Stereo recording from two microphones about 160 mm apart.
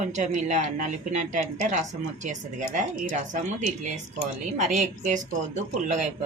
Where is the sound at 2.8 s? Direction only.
50° right (ahead or behind).